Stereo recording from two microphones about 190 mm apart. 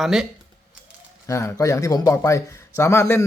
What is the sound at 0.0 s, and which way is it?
Speech, centre (ahead or behind).